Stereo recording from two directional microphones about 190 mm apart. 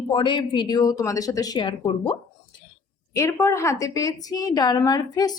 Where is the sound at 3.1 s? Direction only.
15° left (ahead or behind).